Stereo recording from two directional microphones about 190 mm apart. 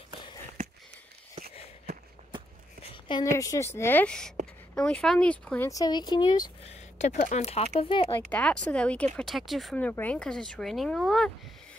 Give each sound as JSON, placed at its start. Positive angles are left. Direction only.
{"t": 2.9, "sound": "speech", "side_deg": 25}
{"t": 5.7, "sound": "speech", "side_deg": 20}
{"t": 6.6, "sound": "speech", "side_deg": 35}
{"t": 8.3, "sound": "speech", "side_deg": 5}